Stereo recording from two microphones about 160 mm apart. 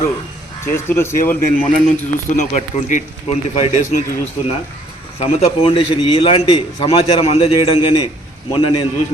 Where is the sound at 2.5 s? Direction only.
45° left (ahead or behind).